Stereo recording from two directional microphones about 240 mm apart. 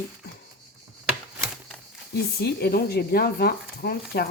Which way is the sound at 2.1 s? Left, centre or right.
Left.